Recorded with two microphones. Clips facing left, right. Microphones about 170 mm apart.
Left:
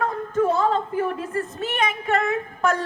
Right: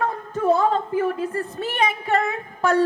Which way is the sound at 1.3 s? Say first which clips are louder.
Even; 35° right (ahead or behind).